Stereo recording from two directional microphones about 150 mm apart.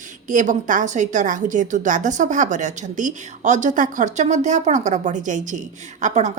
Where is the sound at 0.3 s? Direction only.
60° right (ahead or behind).